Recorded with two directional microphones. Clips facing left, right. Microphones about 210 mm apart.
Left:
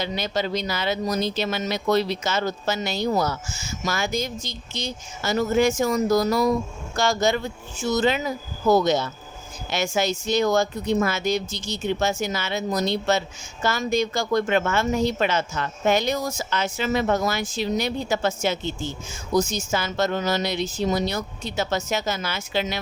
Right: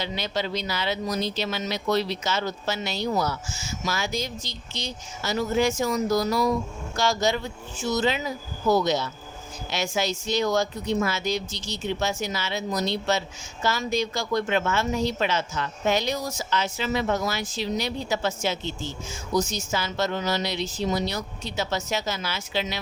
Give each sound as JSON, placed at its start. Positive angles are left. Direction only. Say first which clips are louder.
{"t": 0.0, "sound": "speech", "louder": "left 3 dB", "side_deg": 45}